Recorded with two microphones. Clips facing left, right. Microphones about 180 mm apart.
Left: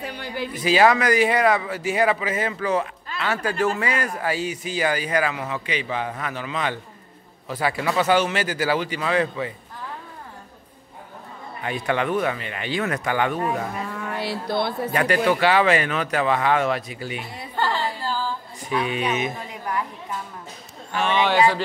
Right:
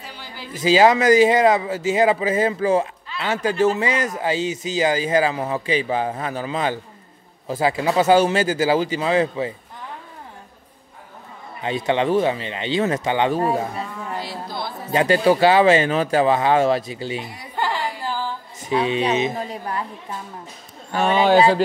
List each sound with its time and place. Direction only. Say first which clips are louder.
0.0 s a sound: left 8 dB; 60° left (ahead or behind)
0.6 s speech: right 3 dB; 25° right (ahead or behind)
11.6 s speech: right 4 dB; 25° right (ahead or behind)
14.1 s speech: left 6 dB; 65° left (ahead or behind)
14.9 s speech: right 6 dB; 25° right (ahead or behind)
17.6 s music: even; 15° right (ahead or behind)
18.7 s speech: right 4 dB; 30° right (ahead or behind)
20.9 s speech: right 5 dB; 40° right (ahead or behind)